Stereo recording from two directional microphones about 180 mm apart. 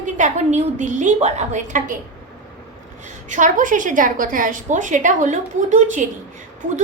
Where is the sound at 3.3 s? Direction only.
45° right (ahead or behind).